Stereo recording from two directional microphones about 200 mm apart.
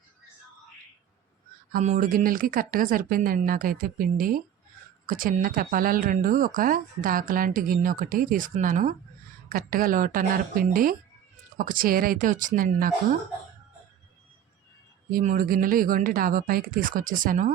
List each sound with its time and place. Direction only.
1.7 s speech: 40° right (ahead or behind)
15.1 s speech: 45° right (ahead or behind)